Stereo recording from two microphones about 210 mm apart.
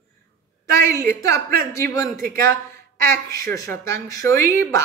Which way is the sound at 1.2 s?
15° left (ahead or behind).